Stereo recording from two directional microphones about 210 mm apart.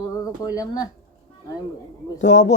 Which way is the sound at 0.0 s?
15° left (ahead or behind).